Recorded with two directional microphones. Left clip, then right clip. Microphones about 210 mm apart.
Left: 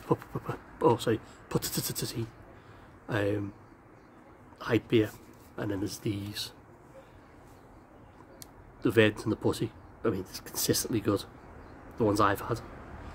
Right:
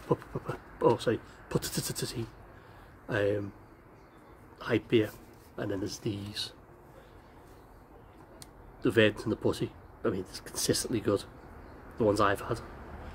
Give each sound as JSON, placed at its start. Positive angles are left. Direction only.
{"t": 0.0, "sound": "speech", "side_deg": 15}
{"t": 4.6, "sound": "speech", "side_deg": 15}
{"t": 8.8, "sound": "speech", "side_deg": 10}